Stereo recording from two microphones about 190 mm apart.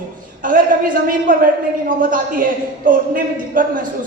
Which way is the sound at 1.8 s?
45° right (ahead or behind).